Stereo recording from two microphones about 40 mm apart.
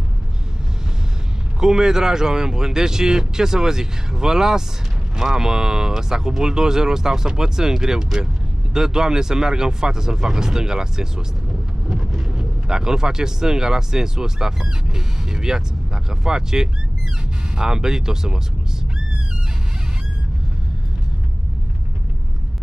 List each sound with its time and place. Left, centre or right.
1.6 s speech: centre
11.9 s vehicle: centre
12.4 s speech: centre